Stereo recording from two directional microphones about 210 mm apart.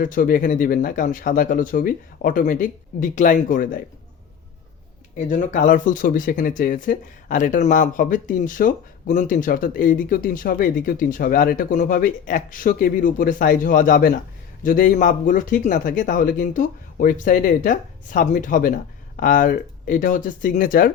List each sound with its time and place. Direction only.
0.0 s speech: 40° left (ahead or behind)
5.1 s speech: 35° left (ahead or behind)